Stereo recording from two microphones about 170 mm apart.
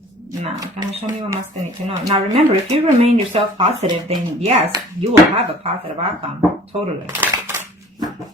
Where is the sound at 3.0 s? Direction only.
35° right (ahead or behind).